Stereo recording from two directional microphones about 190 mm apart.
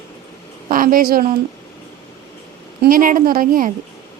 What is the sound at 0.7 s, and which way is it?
Speech, 45° right (ahead or behind).